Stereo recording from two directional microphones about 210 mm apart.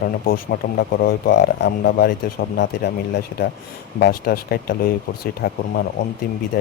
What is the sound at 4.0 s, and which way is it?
Speech, 45° left (ahead or behind).